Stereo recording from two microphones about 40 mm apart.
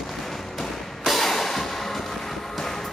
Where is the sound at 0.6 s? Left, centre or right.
Centre.